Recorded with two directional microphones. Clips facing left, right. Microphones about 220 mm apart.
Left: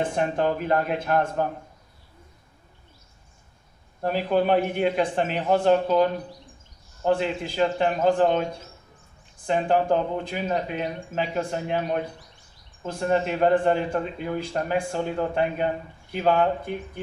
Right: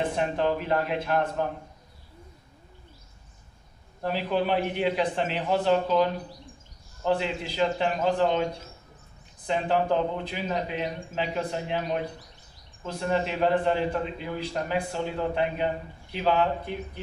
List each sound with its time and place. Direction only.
0.2 s a man's voice: 50° left (ahead or behind)
4.0 s a man's voice: 50° left (ahead or behind)
7.1 s a man's voice: 50° left (ahead or behind)